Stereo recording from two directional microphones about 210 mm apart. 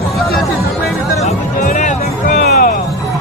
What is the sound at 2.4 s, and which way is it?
Music, 45° left (ahead or behind).